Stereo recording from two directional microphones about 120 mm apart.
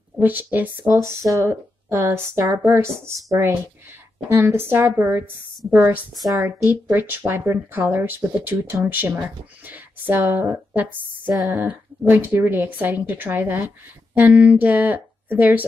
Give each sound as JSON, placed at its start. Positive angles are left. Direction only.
{"t": 0.2, "sound": "speech", "side_deg": -15}
{"t": 6.2, "sound": "speech", "side_deg": -25}